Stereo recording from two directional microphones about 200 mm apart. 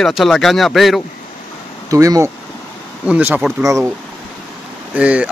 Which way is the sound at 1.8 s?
15° right (ahead or behind).